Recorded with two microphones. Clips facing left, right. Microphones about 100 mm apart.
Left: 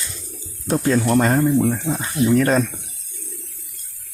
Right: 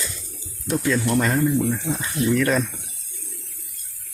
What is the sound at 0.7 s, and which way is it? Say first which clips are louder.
Speech: left 4 dB; 35° left (ahead or behind).